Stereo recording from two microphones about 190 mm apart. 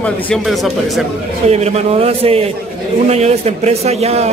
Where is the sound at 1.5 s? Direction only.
35° right (ahead or behind).